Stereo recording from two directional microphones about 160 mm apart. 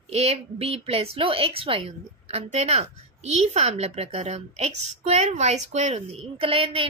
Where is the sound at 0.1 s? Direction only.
40° right (ahead or behind).